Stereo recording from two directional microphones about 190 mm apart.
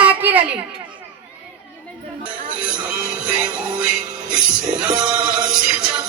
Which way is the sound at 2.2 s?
5° right (ahead or behind).